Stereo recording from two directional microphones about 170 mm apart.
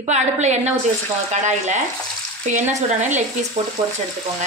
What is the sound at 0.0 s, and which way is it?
A woman's voice, 40° right (ahead or behind).